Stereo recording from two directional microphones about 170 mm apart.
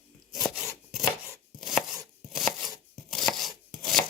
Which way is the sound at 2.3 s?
Centre (ahead or behind).